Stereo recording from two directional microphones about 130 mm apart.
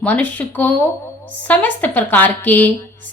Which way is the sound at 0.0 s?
10° left (ahead or behind).